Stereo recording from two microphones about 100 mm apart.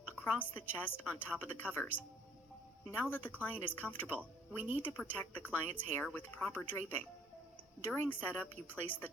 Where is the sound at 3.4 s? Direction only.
15° left (ahead or behind).